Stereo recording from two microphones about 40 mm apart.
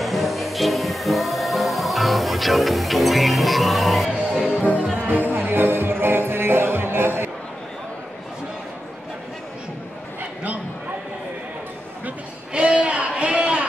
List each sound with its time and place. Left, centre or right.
0.0 s music: centre
5.0 s music: right
12.5 s a sound: right